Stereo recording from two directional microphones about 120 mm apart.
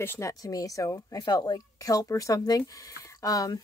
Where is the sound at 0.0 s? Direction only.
20° left (ahead or behind).